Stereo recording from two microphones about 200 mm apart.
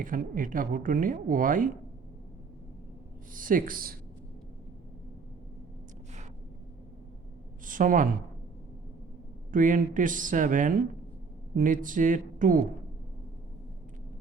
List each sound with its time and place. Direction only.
0.0 s speech: 45° right (ahead or behind)
3.3 s speech: 45° right (ahead or behind)
7.6 s speech: 40° right (ahead or behind)
9.5 s speech: 40° right (ahead or behind)